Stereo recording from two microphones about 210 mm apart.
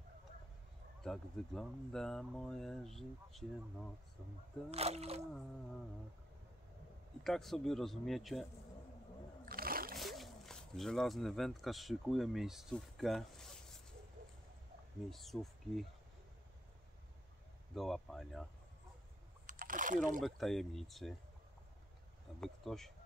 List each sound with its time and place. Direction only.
1.0 s speech: 5° left (ahead or behind)
4.6 s speech: 30° right (ahead or behind)
7.2 s speech: centre (ahead or behind)
9.5 s a sound: 45° right (ahead or behind)
9.9 s speech: centre (ahead or behind)
15.0 s speech: centre (ahead or behind)
17.7 s speech: centre (ahead or behind)
19.4 s a sound: 40° right (ahead or behind)
20.2 s speech: centre (ahead or behind)
22.4 s speech: centre (ahead or behind)